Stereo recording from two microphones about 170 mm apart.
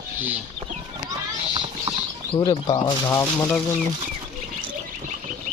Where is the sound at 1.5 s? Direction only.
30° right (ahead or behind).